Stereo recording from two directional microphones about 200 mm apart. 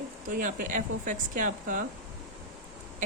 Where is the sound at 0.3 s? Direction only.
40° right (ahead or behind).